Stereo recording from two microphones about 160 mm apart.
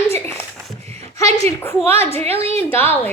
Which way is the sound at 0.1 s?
15° left (ahead or behind).